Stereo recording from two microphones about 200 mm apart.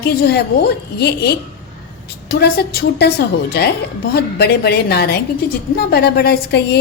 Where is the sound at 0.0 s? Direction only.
55° left (ahead or behind).